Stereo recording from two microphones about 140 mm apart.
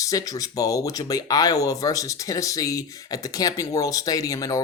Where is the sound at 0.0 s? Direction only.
25° left (ahead or behind).